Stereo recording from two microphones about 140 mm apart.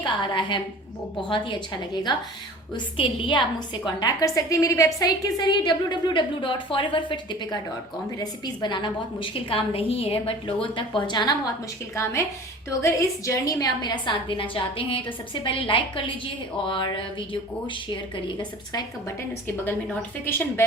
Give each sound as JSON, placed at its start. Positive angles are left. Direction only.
{"t": 0.0, "sound": "a woman's voice", "side_deg": 35}
{"t": 2.7, "sound": "a woman's voice", "side_deg": 35}
{"t": 11.9, "sound": "a woman's voice", "side_deg": 20}
{"t": 19.6, "sound": "a woman's voice", "side_deg": 15}